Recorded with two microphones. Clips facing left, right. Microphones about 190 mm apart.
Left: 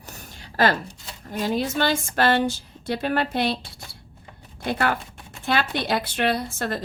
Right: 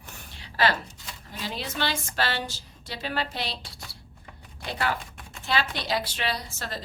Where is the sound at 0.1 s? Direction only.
45° left (ahead or behind).